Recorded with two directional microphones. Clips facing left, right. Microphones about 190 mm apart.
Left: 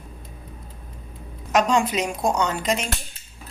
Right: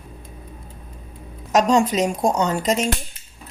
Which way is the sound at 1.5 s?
40° right (ahead or behind).